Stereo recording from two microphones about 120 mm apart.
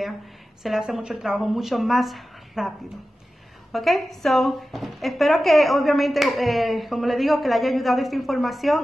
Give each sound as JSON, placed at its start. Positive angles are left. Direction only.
{"t": 0.7, "sound": "speech", "side_deg": -5}
{"t": 3.7, "sound": "speech", "side_deg": 0}